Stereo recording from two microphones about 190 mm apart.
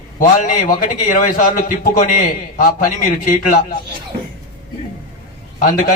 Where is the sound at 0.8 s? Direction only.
45° left (ahead or behind).